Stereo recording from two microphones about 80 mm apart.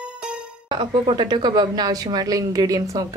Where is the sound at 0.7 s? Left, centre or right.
Right.